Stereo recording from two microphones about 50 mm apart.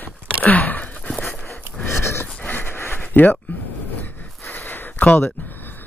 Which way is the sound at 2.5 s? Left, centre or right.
Left.